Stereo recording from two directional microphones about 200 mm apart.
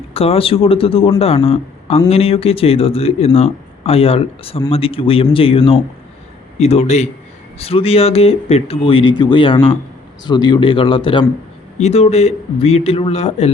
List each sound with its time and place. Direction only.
0.1 s a man's voice: 30° left (ahead or behind)